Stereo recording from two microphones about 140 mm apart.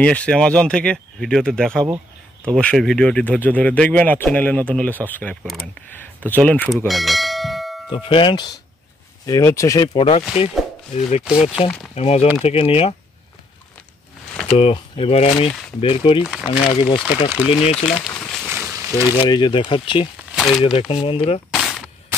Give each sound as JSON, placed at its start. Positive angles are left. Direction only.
{"t": 0.0, "sound": "speech", "side_deg": 10}
{"t": 6.9, "sound": "bell", "side_deg": 0}
{"t": 7.9, "sound": "speech", "side_deg": 40}
{"t": 9.2, "sound": "speech", "side_deg": 20}
{"t": 9.9, "sound": "speech", "side_deg": 50}
{"t": 14.6, "sound": "speech", "side_deg": 45}
{"t": 18.2, "sound": "a sound", "side_deg": 5}
{"t": 18.5, "sound": "a sound", "side_deg": -15}
{"t": 19.1, "sound": "speech", "side_deg": 35}
{"t": 20.3, "sound": "speech", "side_deg": 0}
{"t": 20.9, "sound": "speech", "side_deg": 40}
{"t": 21.5, "sound": "a sound", "side_deg": 0}